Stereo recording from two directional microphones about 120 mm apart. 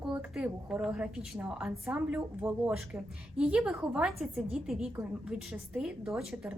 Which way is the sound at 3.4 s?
10° right (ahead or behind).